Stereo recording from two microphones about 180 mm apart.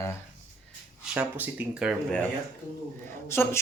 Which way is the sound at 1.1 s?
10° right (ahead or behind).